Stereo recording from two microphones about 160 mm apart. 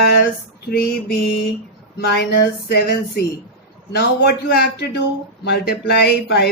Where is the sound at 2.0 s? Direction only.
90° left.